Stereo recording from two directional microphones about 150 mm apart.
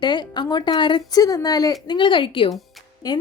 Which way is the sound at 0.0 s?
30° left (ahead or behind).